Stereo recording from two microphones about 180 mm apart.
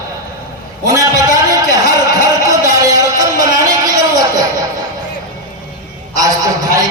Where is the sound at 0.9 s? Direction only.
20° right (ahead or behind).